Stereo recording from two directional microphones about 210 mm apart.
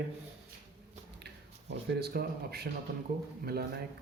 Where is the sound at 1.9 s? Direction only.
50° right (ahead or behind).